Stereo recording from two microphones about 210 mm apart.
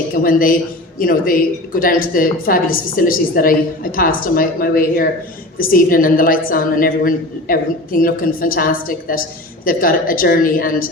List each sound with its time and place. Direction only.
0.1 s a woman's voice: 40° left (ahead or behind)